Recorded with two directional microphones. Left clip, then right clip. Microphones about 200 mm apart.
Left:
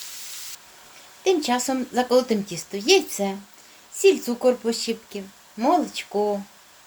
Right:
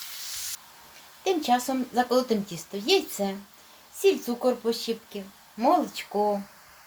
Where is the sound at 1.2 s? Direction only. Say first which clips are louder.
Left 3 dB; 20° left (ahead or behind).